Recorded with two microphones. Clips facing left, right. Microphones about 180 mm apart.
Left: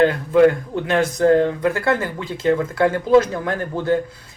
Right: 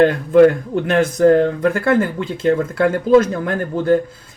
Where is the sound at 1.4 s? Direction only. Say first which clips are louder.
Right 2 dB; 50° right (ahead or behind).